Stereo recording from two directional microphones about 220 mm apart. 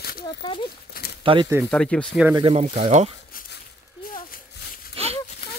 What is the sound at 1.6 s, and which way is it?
Speech, 5° left (ahead or behind).